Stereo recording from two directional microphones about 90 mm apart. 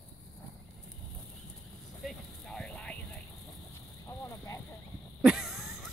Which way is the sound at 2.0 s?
5° left (ahead or behind).